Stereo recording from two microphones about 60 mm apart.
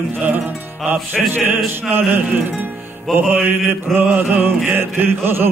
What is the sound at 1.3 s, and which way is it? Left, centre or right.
Chant, right.